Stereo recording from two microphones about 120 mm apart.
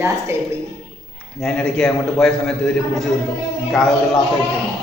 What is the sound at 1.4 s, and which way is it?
A man's voice, 5° left (ahead or behind).